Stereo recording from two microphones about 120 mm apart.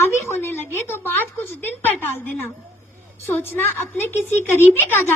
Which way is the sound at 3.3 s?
20° left (ahead or behind).